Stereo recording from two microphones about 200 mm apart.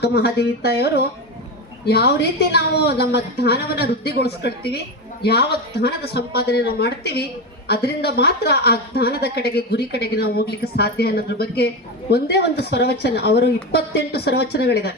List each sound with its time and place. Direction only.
0.0 s a woman's voice: 55° left (ahead or behind)